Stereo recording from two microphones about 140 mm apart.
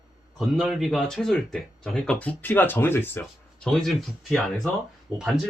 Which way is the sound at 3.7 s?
Centre (ahead or behind).